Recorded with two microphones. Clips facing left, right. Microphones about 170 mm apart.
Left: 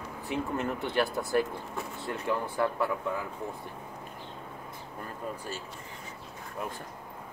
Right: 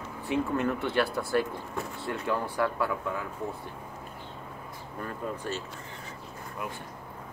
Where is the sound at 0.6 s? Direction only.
20° left (ahead or behind).